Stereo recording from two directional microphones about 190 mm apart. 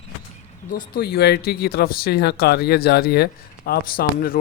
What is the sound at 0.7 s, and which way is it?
A man's voice, 50° left (ahead or behind).